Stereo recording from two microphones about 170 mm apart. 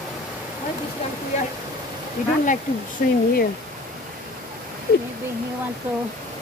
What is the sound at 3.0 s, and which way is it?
Speech, 55° left (ahead or behind).